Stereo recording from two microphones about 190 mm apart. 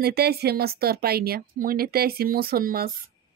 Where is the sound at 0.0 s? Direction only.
55° right (ahead or behind).